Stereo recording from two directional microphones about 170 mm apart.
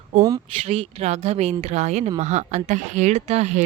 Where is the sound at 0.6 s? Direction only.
40° right (ahead or behind).